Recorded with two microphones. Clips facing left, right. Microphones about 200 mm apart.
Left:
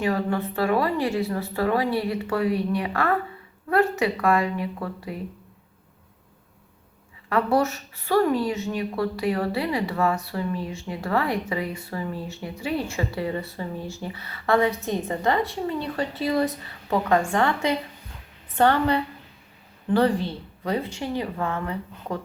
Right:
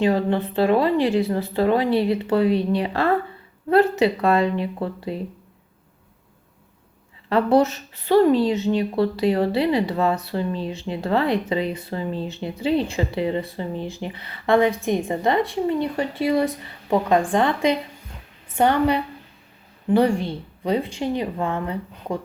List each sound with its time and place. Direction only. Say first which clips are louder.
0.0 s speech: right 4 dB; 25° right (ahead or behind)
7.3 s a woman's voice: right 4 dB; 25° right (ahead or behind)